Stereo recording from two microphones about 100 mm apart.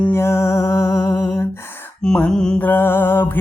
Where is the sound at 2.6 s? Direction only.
20° left (ahead or behind).